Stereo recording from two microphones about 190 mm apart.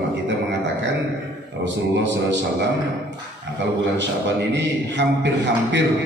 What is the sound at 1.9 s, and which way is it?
Speech, 70° right (ahead or behind).